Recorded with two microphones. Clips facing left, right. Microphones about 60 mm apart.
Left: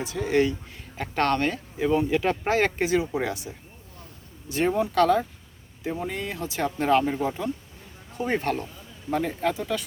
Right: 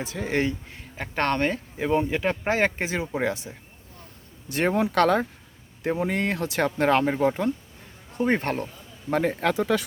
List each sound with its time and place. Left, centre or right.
0.0 s speech: right
4.4 s speech: right
9.4 s speech: right